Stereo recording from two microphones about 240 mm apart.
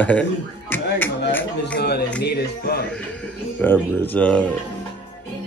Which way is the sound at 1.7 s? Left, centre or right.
Left.